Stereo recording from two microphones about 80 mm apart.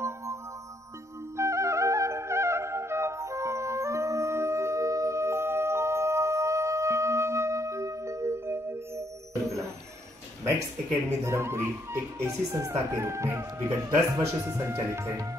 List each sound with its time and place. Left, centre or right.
1.3 s music: right
11.2 s speech: right